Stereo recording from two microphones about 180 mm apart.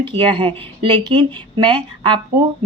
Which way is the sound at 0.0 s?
25° right (ahead or behind).